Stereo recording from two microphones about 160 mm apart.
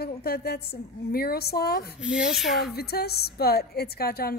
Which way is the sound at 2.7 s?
80° left.